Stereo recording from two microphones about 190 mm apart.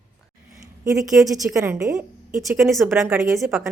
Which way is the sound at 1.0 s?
Centre (ahead or behind).